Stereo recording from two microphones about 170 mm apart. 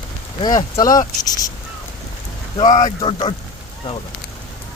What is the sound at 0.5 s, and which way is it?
Speech, 20° left (ahead or behind).